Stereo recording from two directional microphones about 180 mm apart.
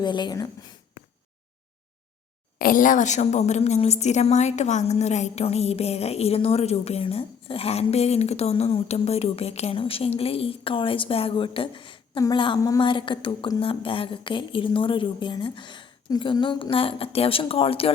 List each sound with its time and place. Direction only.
0.0 s speech: 25° left (ahead or behind)
2.6 s a woman's voice: 50° left (ahead or behind); by 17.9 s 30° left (ahead or behind)